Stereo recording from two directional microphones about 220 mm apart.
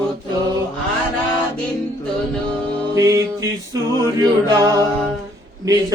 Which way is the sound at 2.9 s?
15° right (ahead or behind).